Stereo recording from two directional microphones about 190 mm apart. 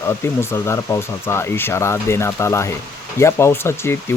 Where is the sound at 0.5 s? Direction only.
15° left (ahead or behind).